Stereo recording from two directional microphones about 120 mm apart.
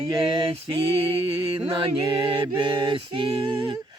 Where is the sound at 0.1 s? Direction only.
40° right (ahead or behind).